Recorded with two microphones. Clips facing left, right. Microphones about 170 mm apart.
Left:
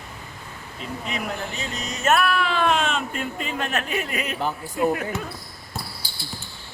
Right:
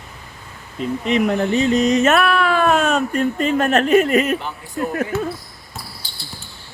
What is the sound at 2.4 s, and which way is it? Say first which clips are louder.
Speech: right 6 dB; 50° right (ahead or behind).